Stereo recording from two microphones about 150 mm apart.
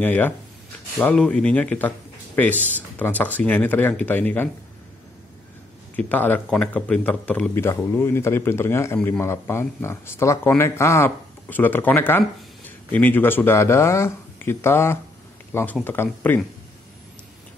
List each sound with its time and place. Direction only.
0.0 s a man's voice: 10° left (ahead or behind)
5.9 s a man's voice: 10° left (ahead or behind)